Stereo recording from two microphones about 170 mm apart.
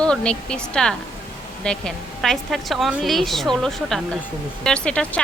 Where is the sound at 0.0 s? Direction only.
5° left (ahead or behind).